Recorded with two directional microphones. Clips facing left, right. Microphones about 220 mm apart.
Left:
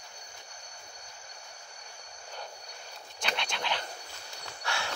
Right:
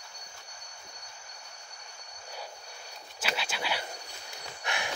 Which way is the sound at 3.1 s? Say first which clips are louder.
Even; 5° right (ahead or behind).